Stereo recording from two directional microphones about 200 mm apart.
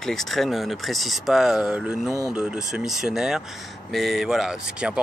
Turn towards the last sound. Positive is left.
turn(degrees=-5)  # may be behind; listen again after turning